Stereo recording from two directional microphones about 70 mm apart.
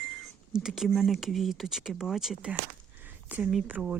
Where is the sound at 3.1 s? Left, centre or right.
Right.